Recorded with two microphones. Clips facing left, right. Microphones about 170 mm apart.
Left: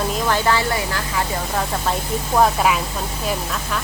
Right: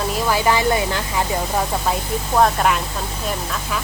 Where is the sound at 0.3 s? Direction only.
10° right (ahead or behind).